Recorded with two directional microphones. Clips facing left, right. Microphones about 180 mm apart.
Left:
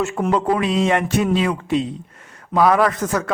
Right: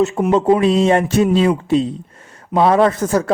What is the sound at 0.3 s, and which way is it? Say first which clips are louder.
A man's voice: right 5 dB; 25° right (ahead or behind).